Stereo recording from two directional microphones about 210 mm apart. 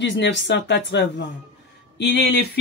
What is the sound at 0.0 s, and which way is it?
Speech, 55° left (ahead or behind).